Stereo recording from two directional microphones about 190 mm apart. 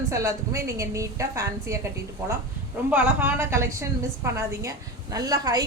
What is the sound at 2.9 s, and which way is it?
A woman's voice, 5° right (ahead or behind).